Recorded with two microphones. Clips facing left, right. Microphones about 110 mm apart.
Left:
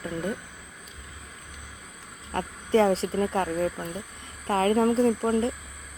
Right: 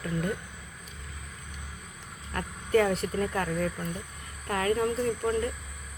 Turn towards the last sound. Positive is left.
turn(degrees=30)  # may be behind; listen again after turning